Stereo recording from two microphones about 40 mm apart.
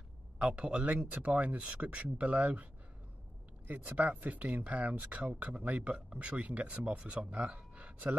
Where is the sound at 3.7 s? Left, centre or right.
Right.